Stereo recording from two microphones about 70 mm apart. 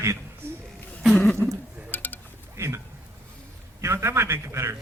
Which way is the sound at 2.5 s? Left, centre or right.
Right.